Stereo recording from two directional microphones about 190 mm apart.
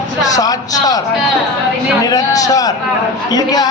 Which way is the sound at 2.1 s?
20° left (ahead or behind).